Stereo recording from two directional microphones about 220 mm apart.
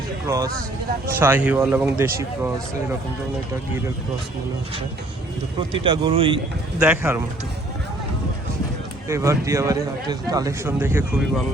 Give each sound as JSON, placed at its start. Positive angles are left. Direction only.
{"t": 0.3, "sound": "a man's voice", "side_deg": -15}
{"t": 5.8, "sound": "speech", "side_deg": -20}
{"t": 6.7, "sound": "a man's voice", "side_deg": -10}
{"t": 9.0, "sound": "a man's voice", "side_deg": -15}